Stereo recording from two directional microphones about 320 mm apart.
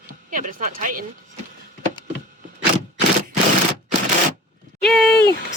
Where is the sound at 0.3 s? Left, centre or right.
Right.